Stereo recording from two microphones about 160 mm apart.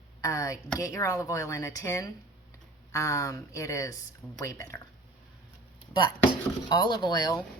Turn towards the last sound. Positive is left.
turn(degrees=25)  # may be behind; listen again after turning